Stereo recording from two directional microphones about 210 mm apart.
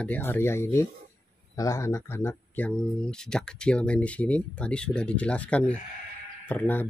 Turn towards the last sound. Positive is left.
turn(degrees=10)  # may be behind; listen again after turning